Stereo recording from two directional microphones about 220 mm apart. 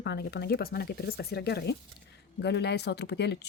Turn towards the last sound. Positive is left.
turn(degrees=50)  # may be behind; listen again after turning